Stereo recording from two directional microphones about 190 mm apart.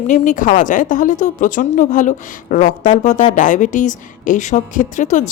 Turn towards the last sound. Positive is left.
turn(degrees=40)  # may be behind; listen again after turning